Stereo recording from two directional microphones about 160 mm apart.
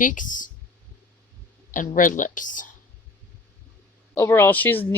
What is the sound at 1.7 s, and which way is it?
Speech, 55° left (ahead or behind).